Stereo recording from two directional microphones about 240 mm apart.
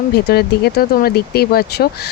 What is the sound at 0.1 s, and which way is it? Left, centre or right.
Speech, left.